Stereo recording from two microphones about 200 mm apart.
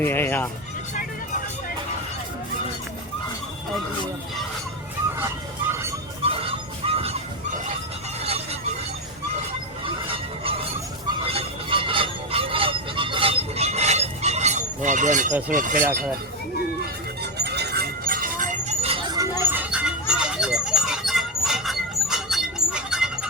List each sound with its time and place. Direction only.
0.0 s speech: 10° left (ahead or behind)
6.2 s music: 30° right (ahead or behind)
11.3 s honk: 25° right (ahead or behind)
15.3 s speech: 10° right (ahead or behind)
15.5 s speech: 40° right (ahead or behind)
15.8 s speech: 10° right (ahead or behind)
17.3 s a sound: 55° right (ahead or behind); by 18.9 s 30° right (ahead or behind)
19.4 s a sound: 10° right (ahead or behind)